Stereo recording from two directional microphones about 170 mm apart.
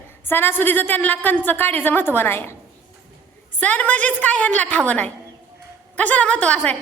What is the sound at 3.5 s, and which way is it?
A woman's voice, 10° left (ahead or behind).